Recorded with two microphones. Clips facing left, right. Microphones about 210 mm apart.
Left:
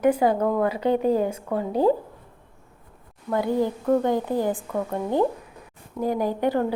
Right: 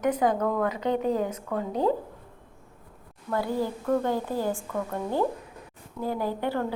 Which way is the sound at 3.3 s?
20° left (ahead or behind).